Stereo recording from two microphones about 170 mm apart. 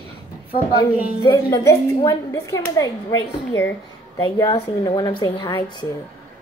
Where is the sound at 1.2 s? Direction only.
20° left (ahead or behind).